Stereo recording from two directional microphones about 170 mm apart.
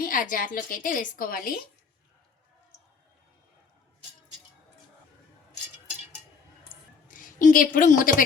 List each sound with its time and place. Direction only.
0.0 s a woman's voice: 50° left (ahead or behind)
7.1 s a woman's voice: 50° left (ahead or behind)